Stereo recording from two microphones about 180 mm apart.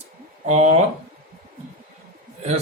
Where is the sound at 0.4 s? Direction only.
40° right (ahead or behind).